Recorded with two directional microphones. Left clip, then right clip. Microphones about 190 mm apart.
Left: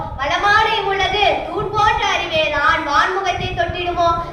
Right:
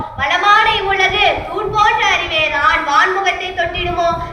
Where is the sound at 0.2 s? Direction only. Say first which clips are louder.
Right 3 dB; 40° right (ahead or behind).